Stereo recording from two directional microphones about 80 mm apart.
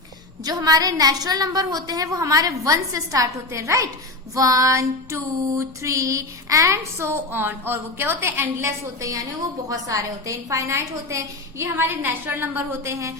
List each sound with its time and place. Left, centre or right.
0.4 s a woman's voice: right
4.4 s female singing: right